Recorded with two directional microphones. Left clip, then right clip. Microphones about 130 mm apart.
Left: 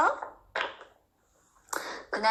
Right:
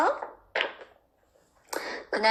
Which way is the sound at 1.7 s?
40° right (ahead or behind).